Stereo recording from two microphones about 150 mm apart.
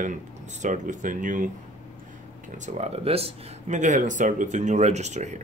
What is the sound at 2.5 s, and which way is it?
Speech, 50° right (ahead or behind).